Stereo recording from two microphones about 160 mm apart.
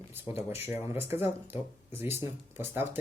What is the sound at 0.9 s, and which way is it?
Speech, 15° right (ahead or behind).